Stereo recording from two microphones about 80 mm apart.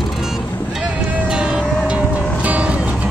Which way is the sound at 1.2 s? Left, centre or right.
Centre.